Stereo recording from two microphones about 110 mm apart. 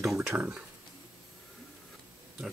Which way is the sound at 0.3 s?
15° right (ahead or behind).